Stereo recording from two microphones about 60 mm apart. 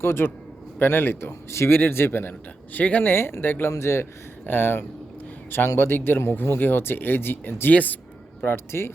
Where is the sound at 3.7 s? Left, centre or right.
Left.